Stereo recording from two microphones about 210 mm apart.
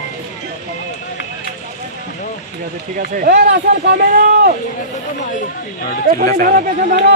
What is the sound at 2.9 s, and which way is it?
Speech, 45° right (ahead or behind).